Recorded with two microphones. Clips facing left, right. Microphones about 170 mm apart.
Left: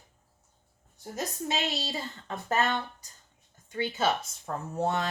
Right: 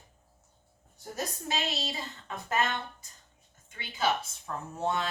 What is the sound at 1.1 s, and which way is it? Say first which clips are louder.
Speech: left 2 dB; 25° left (ahead or behind).